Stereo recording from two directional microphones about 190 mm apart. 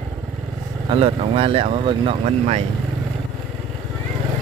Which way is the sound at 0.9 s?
30° right (ahead or behind).